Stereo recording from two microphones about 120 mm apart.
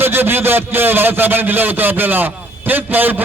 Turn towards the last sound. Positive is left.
turn(degrees=-15)  # may be behind; listen again after turning